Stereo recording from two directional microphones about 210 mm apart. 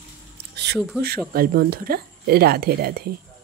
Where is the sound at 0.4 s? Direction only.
50° right (ahead or behind).